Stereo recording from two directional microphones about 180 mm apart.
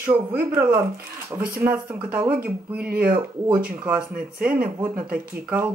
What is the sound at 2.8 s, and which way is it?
Speech, 55° right (ahead or behind).